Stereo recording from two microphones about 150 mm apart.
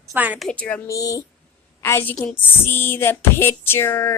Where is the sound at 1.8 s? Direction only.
15° left (ahead or behind).